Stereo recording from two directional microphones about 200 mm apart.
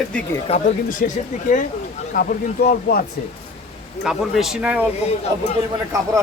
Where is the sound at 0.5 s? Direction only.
30° left (ahead or behind).